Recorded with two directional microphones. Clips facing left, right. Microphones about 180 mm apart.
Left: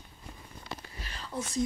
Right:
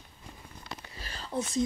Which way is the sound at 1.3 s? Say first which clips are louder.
Right 4 dB; 25° right (ahead or behind).